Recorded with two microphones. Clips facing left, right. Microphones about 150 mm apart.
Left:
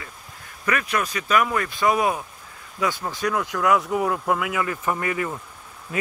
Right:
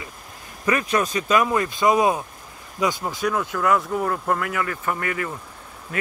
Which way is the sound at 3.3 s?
Centre (ahead or behind).